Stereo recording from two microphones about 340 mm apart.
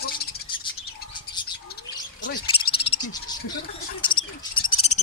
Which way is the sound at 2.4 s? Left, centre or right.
Centre.